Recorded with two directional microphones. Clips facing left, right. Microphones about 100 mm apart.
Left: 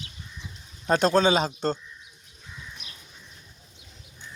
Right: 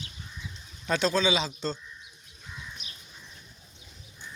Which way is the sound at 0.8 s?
45° left (ahead or behind).